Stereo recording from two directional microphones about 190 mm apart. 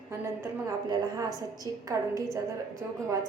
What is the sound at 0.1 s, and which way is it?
A woman's voice, 20° right (ahead or behind).